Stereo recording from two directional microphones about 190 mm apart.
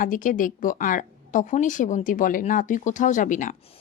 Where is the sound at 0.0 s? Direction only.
45° left (ahead or behind).